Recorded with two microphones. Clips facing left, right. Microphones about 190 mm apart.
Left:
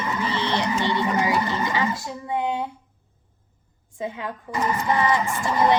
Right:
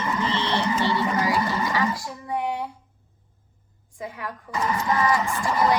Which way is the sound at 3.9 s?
25° left (ahead or behind).